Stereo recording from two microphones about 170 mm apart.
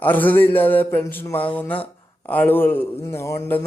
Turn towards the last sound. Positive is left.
turn(degrees=15)  # may be behind; listen again after turning